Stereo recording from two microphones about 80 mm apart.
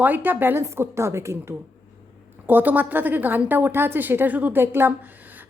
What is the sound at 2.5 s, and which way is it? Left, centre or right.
A woman's voice, right.